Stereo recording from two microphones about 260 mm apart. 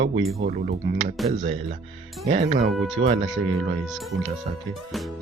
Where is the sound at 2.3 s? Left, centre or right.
Right.